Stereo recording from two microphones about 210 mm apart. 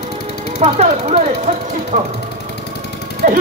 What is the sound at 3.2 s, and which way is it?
Speech, 40° right (ahead or behind).